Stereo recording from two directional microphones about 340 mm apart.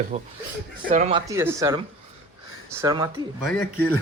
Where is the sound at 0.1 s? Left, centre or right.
Centre.